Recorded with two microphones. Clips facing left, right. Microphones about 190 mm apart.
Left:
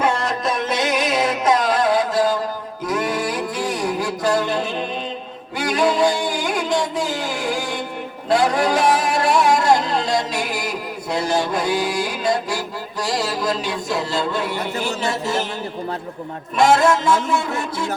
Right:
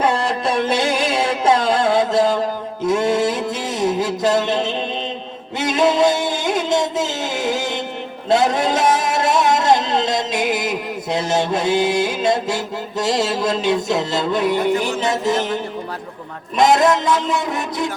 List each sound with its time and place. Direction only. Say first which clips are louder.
0.0 s music: right 2 dB; 30° right (ahead or behind)
8.3 s speech: right 1 dB; 20° right (ahead or behind)
16.6 s speech: right 1 dB; 20° right (ahead or behind)